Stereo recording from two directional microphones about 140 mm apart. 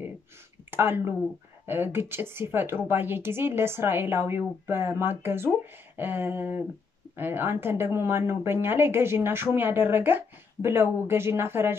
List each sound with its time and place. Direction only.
0.7 s speech: 15° right (ahead or behind)